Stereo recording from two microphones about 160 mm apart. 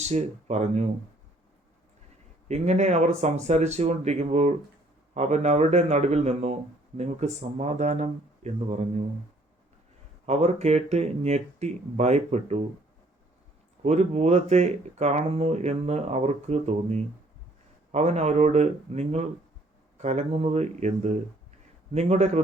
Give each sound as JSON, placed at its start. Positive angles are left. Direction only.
{"t": 0.0, "sound": "speech", "side_deg": -45}
{"t": 2.5, "sound": "speech", "side_deg": -45}
{"t": 10.2, "sound": "speech", "side_deg": -40}
{"t": 13.8, "sound": "speech", "side_deg": -45}